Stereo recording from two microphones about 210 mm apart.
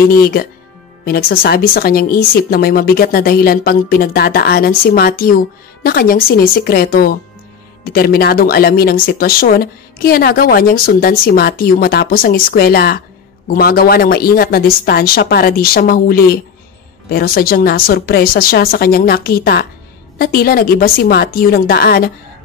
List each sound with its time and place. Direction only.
0.1 s speech: 45° left (ahead or behind)